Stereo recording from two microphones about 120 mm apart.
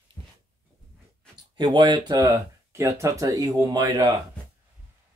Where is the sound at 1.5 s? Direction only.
40° right (ahead or behind).